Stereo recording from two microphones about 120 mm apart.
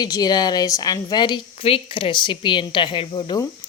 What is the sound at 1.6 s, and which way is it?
Speech, 50° left (ahead or behind).